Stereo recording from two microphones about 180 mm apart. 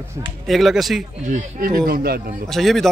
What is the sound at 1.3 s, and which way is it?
Speech, 50° right (ahead or behind).